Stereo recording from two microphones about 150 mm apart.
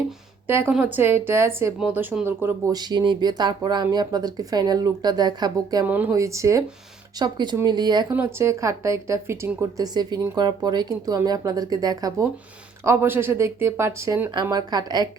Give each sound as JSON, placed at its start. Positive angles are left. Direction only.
{"t": 0.4, "sound": "speech", "side_deg": -15}
{"t": 2.7, "sound": "speech", "side_deg": -30}
{"t": 5.8, "sound": "speech", "side_deg": -10}
{"t": 8.1, "sound": "speech", "side_deg": -15}